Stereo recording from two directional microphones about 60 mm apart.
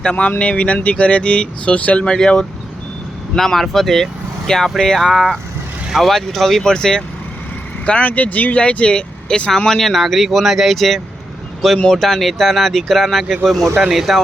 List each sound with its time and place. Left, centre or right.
0.0 s speech: centre
2.0 s speech: centre
4.9 s speech: centre
7.9 s speech: left; by 14.2 s centre